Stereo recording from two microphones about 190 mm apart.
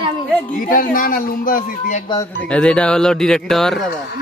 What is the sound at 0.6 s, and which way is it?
A man's voice, 45° left (ahead or behind).